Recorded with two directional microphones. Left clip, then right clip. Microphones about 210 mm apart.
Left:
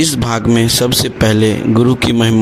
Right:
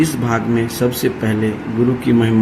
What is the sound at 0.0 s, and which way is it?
Speech, 50° left (ahead or behind).